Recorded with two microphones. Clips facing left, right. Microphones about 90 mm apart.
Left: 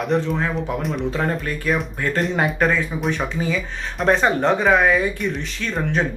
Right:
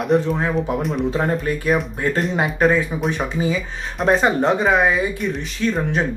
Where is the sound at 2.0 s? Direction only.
5° right (ahead or behind).